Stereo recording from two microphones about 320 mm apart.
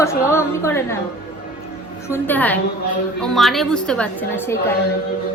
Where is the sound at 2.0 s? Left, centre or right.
Centre.